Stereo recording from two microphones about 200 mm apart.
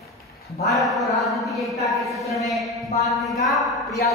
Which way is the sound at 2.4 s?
Centre (ahead or behind).